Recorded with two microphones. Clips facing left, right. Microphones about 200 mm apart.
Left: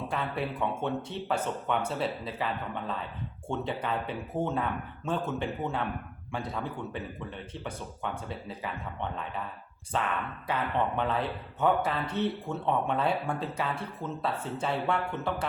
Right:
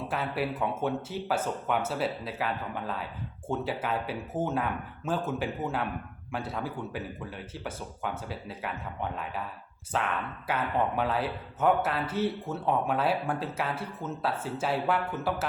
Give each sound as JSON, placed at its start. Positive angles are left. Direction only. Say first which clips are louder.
{"t": 0.1, "sound": "speech", "louder": "right 3 dB", "side_deg": -5}